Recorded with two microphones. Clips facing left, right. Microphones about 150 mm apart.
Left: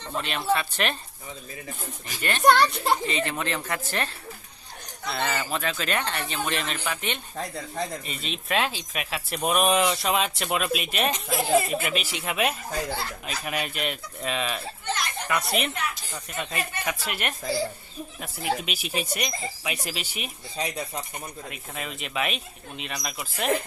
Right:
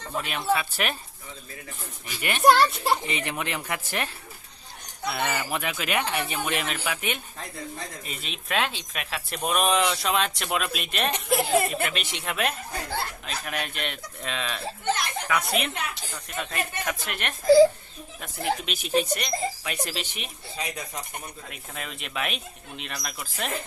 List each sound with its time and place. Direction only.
0.1 s speech: 5° right (ahead or behind)
2.2 s speech: 10° right (ahead or behind)
3.1 s speech: 15° right (ahead or behind); by 11.1 s centre (ahead or behind)
11.1 s speech: 60° right (ahead or behind)
11.9 s speech: 5° left (ahead or behind)
20.6 s speech: 30° left (ahead or behind)
21.5 s speech: centre (ahead or behind)